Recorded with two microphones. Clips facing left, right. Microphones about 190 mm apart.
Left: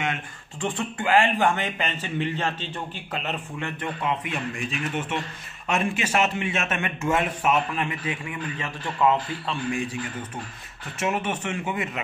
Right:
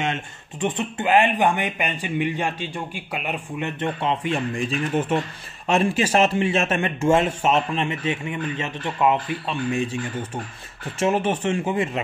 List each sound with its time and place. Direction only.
0.0 s a man's voice: 25° right (ahead or behind)
11.0 s speech: 30° right (ahead or behind)